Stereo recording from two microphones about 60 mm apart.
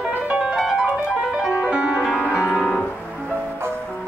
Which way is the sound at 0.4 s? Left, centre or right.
Centre.